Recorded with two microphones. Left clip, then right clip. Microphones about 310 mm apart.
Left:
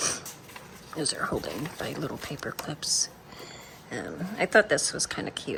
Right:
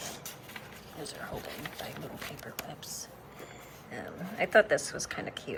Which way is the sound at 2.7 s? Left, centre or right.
Left.